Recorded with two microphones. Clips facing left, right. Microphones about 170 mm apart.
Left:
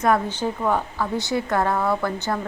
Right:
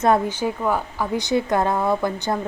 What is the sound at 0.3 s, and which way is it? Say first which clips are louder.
A woman's voice: right 1 dB; 10° right (ahead or behind).